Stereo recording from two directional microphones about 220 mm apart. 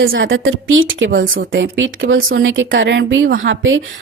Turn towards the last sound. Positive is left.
turn(degrees=-60)  # may be behind; listen again after turning